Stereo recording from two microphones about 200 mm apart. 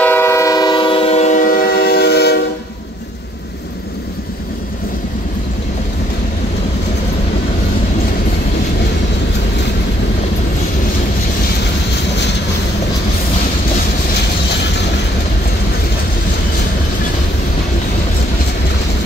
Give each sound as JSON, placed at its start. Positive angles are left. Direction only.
{"t": 0.0, "sound": "train", "side_deg": 10}